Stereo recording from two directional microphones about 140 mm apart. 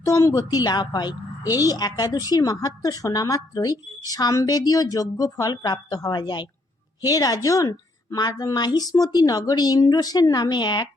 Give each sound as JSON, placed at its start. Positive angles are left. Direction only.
{"t": 0.0, "sound": "speech", "side_deg": 25}